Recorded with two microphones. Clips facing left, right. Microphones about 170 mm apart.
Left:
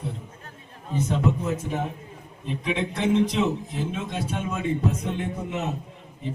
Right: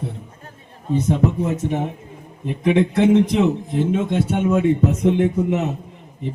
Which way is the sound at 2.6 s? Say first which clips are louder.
Right 10 dB; 60° right (ahead or behind).